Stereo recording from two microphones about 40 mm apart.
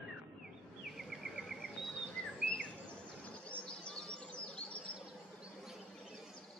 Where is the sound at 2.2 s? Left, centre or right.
Left.